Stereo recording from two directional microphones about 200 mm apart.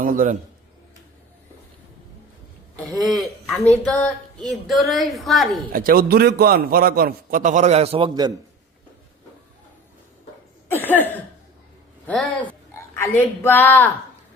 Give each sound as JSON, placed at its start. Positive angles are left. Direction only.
{"t": 0.0, "sound": "a man's voice", "side_deg": -45}
{"t": 2.7, "sound": "a woman's voice", "side_deg": 5}
{"t": 5.7, "sound": "a man's voice", "side_deg": -50}
{"t": 10.7, "sound": "cough", "side_deg": 10}
{"t": 12.0, "sound": "a woman's voice", "side_deg": 5}